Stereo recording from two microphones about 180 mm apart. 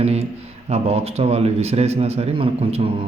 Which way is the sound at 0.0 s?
35° right (ahead or behind).